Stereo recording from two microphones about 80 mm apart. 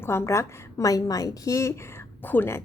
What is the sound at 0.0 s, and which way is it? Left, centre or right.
A woman's voice, left.